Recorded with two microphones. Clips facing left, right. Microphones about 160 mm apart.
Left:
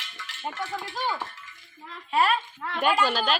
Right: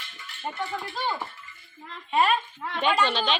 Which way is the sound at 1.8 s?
5° left (ahead or behind).